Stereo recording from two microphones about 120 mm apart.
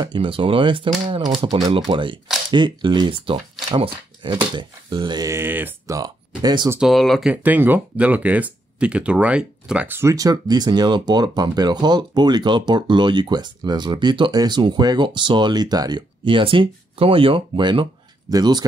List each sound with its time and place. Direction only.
0.0 s speech: 45° right (ahead or behind)
5.3 s speech: 15° right (ahead or behind)
5.9 s speech: 35° right (ahead or behind)
6.8 s speech: centre (ahead or behind)
7.4 s speech: 15° right (ahead or behind)
10.1 s speech: 30° right (ahead or behind)